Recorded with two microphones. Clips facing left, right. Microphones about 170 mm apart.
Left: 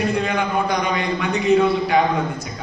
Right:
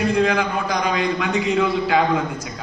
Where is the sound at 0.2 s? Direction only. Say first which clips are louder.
Right 2 dB; 90° right.